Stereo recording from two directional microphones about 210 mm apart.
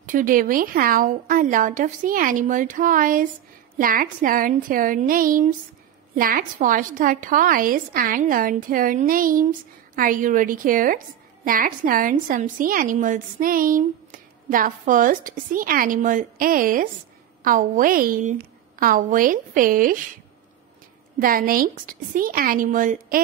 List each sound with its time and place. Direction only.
0.0 s a woman's voice: 40° right (ahead or behind)
21.2 s a woman's voice: 40° right (ahead or behind)